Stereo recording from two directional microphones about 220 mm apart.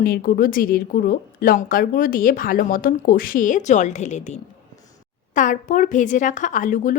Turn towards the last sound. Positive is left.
turn(degrees=35)  # may be behind; listen again after turning